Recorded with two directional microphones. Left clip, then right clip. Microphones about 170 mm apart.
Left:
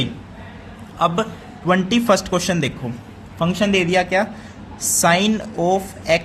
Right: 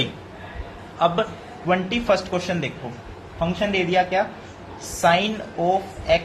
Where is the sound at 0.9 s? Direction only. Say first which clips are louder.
Left 1 dB; 35° left (ahead or behind).